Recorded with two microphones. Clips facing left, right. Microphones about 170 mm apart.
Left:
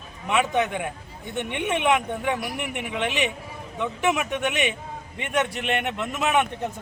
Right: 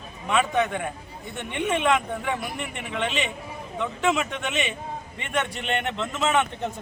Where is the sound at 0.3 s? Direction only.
15° left (ahead or behind).